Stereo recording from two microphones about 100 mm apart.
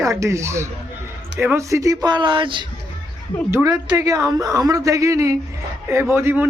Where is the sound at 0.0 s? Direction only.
30° right (ahead or behind); by 2.6 s 55° right (ahead or behind).